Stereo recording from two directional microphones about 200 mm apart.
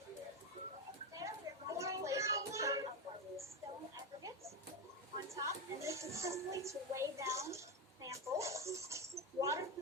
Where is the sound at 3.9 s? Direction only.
15° right (ahead or behind).